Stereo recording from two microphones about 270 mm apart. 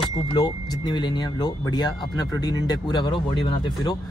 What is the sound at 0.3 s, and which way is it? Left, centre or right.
Speech, centre.